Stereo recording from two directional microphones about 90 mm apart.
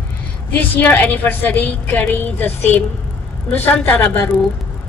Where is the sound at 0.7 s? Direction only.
20° left (ahead or behind).